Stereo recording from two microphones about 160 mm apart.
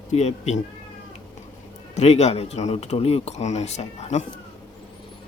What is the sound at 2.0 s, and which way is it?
Speech, 45° left (ahead or behind).